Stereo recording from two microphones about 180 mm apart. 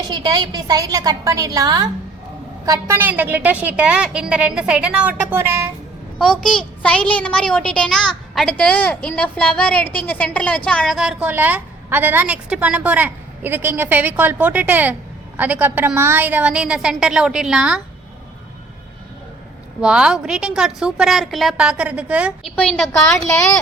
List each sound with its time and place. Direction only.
0.1 s a woman's voice: 25° right (ahead or behind)
6.1 s a woman's voice: 5° left (ahead or behind)
19.8 s a woman's voice: 5° right (ahead or behind)
22.5 s a woman's voice: 5° left (ahead or behind)